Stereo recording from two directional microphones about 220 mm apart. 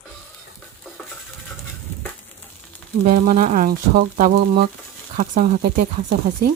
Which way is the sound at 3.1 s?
40° right (ahead or behind).